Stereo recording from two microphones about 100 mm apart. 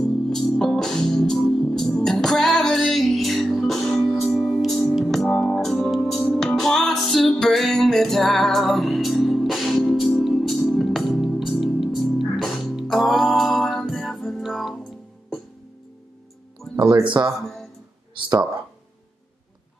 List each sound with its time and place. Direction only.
0.0 s music: 5° left (ahead or behind)
17.0 s speech: 50° right (ahead or behind)